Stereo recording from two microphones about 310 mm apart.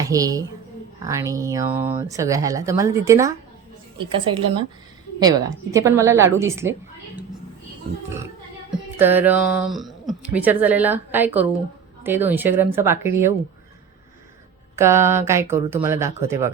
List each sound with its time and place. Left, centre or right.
0.0 s speech: centre
5.7 s speech: centre
9.0 s speech: centre
14.8 s speech: centre